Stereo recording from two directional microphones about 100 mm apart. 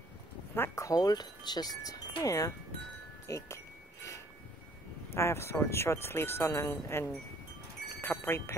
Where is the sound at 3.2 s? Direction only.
30° left (ahead or behind).